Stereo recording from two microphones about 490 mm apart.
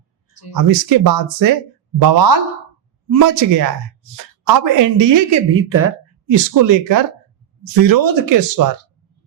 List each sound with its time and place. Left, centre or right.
0.5 s speech: right
5.5 s a woman's voice: right
6.2 s speech: right